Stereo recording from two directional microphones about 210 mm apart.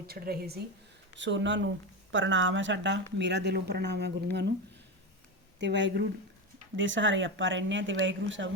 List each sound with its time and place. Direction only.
0.1 s speech: 45° right (ahead or behind)
1.1 s speech: 60° right (ahead or behind)
5.5 s speech: 55° right (ahead or behind)